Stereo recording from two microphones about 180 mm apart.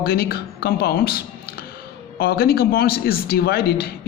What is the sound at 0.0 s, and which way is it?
Speech, 55° left (ahead or behind).